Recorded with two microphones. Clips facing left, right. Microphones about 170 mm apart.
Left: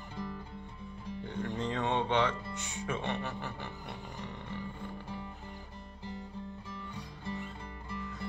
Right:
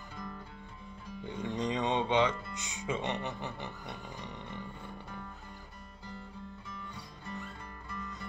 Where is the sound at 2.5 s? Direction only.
15° right (ahead or behind).